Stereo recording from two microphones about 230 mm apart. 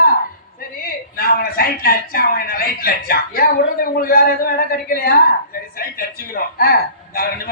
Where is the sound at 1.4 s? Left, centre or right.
Left.